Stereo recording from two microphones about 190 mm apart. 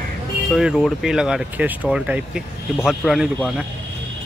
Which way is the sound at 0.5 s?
Centre (ahead or behind).